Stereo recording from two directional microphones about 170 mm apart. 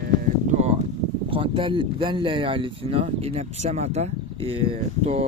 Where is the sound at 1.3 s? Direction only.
30° right (ahead or behind).